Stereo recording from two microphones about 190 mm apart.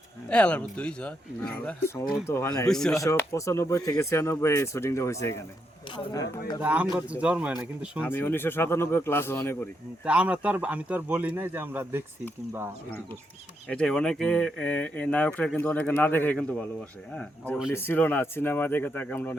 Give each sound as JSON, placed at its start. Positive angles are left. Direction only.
{"t": 0.3, "sound": "speech", "side_deg": 5}
{"t": 2.6, "sound": "speech", "side_deg": 5}
{"t": 2.9, "sound": "speech", "side_deg": 15}
{"t": 6.6, "sound": "speech", "side_deg": -5}
{"t": 8.0, "sound": "speech", "side_deg": 10}
{"t": 10.0, "sound": "speech", "side_deg": -5}
{"t": 13.7, "sound": "speech", "side_deg": 5}